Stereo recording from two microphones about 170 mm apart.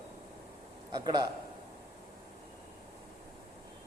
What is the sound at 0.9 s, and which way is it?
Speech, 25° right (ahead or behind).